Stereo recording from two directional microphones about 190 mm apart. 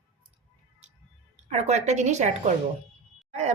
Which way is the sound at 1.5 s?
35° right (ahead or behind).